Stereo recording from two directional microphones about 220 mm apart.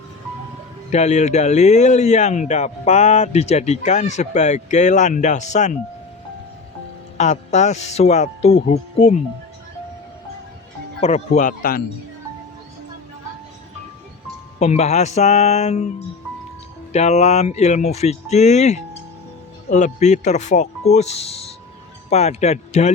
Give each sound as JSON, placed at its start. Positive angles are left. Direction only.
{"t": 0.9, "sound": "speech", "side_deg": 30}
{"t": 7.2, "sound": "speech", "side_deg": 30}
{"t": 11.0, "sound": "speech", "side_deg": 30}
{"t": 14.6, "sound": "speech", "side_deg": 30}